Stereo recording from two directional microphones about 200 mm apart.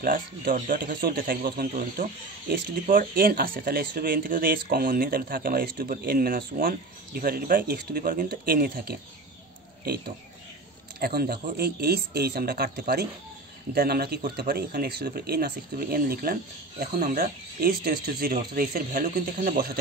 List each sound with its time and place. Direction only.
0.0 s speech: 45° right (ahead or behind)
11.0 s speech: 50° right (ahead or behind)